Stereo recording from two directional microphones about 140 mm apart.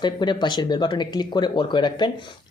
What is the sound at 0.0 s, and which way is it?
Speech, 30° left (ahead or behind).